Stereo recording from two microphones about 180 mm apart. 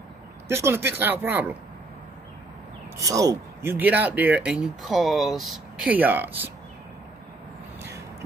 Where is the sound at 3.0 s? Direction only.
20° right (ahead or behind).